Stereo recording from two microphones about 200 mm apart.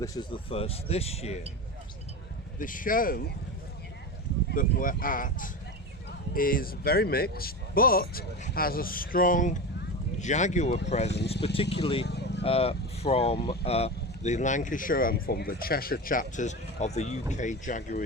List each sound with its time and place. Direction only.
0.0 s speech: 20° left (ahead or behind)
2.6 s speech: 45° left (ahead or behind)
4.5 s speech: 45° left (ahead or behind); by 12.0 s 25° left (ahead or behind)
12.0 s vehicle: 55° left (ahead or behind)
12.4 s speech: 30° left (ahead or behind)